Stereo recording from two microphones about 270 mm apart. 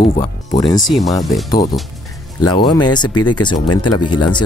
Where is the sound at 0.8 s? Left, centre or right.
Centre.